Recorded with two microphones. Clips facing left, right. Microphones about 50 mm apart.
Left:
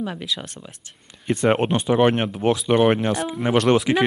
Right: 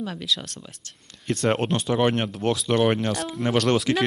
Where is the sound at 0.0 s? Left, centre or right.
Centre.